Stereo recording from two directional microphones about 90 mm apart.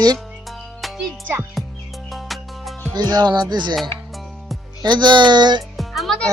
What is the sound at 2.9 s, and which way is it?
Speech, 50° right (ahead or behind).